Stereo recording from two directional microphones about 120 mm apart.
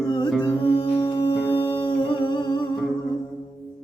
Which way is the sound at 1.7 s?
45° left (ahead or behind).